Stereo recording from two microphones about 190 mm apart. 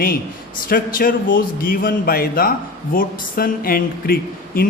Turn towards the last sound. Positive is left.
turn(degrees=50)  # may be behind; listen again after turning